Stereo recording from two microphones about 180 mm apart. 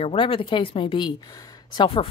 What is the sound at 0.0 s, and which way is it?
Speech, 30° left (ahead or behind).